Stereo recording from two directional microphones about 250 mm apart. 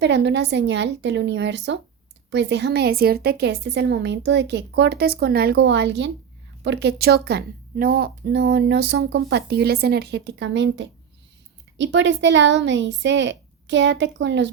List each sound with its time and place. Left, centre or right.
0.0 s a woman's voice: right